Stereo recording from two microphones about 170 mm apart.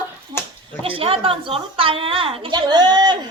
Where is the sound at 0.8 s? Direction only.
35° right (ahead or behind).